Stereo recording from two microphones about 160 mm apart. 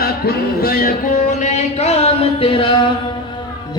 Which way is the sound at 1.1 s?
45° left (ahead or behind).